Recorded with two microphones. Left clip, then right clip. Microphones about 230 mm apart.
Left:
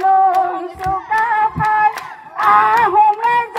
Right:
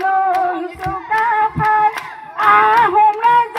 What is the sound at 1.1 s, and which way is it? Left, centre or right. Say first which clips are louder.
Singing: right 1 dB; right.